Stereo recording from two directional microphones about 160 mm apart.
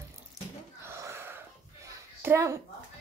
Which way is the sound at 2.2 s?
15° right (ahead or behind).